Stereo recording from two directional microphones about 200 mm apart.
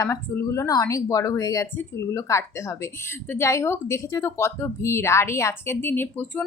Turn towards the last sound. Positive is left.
turn(degrees=10)  # may be behind; listen again after turning